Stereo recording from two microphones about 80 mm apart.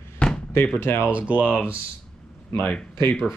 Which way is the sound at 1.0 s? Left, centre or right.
Centre.